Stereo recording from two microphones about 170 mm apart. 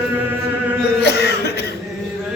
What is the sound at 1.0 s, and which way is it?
Cough, 75° left (ahead or behind).